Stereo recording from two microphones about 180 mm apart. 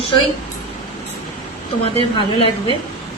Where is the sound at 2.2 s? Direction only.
25° left (ahead or behind).